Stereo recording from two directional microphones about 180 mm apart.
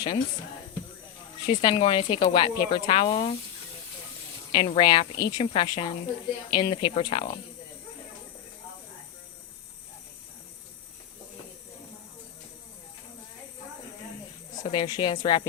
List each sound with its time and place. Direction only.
1.5 s speech: 30° left (ahead or behind)
4.5 s speech: 30° left (ahead or behind)
14.6 s speech: 25° left (ahead or behind)